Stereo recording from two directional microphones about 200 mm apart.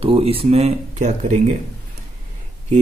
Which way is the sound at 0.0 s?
30° right (ahead or behind).